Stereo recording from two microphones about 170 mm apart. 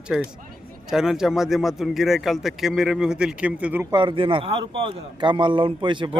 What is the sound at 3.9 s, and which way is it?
A man's voice, 25° right (ahead or behind).